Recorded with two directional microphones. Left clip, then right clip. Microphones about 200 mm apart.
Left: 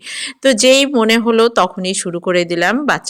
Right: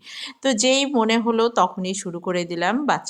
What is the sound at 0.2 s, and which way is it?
A woman's voice, 15° left (ahead or behind).